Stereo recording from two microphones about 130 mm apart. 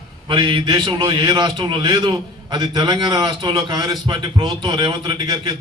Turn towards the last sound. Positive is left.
turn(degrees=-35)  # may be behind; listen again after turning